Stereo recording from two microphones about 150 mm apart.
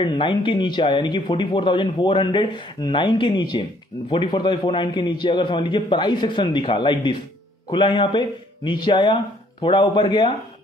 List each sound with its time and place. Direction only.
0.0 s speech: 30° left (ahead or behind)